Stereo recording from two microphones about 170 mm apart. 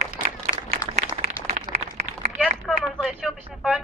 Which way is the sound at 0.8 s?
20° left (ahead or behind).